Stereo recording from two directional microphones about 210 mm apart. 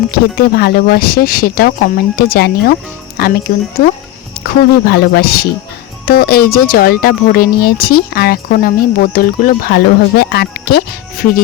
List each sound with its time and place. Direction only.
0.1 s speech: 45° left (ahead or behind)